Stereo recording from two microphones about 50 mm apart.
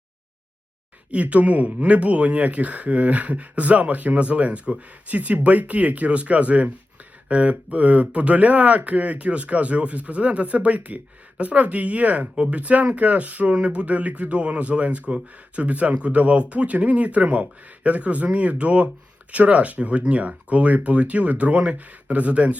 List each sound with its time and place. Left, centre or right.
1.1 s speech: right